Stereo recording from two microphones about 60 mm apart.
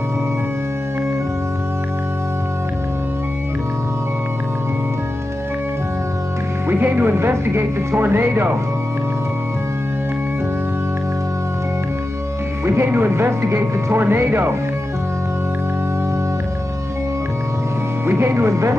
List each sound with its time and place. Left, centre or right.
6.7 s speech: right
12.6 s speech: right
18.0 s speech: right